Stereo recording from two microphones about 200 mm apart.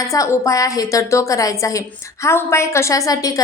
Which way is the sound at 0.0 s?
15° left (ahead or behind).